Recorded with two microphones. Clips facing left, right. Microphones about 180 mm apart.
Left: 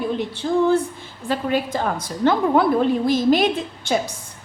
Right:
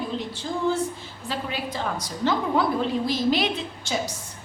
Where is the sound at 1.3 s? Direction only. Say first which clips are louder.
Left 8 dB; 50° left (ahead or behind).